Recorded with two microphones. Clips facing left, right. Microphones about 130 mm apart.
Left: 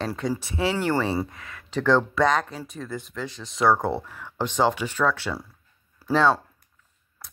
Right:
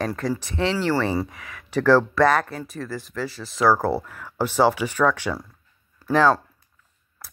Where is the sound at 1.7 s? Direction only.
10° right (ahead or behind).